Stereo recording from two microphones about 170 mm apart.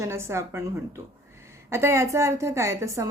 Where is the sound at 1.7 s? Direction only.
15° right (ahead or behind).